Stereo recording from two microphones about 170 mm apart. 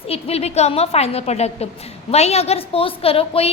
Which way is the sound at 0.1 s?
35° left (ahead or behind).